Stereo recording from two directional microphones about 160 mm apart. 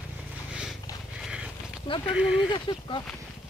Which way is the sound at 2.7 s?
30° left (ahead or behind).